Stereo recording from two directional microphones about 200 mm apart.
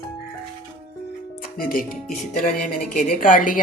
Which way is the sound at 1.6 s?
45° left (ahead or behind).